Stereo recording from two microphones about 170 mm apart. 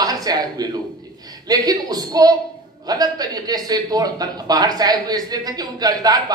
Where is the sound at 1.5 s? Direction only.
25° right (ahead or behind).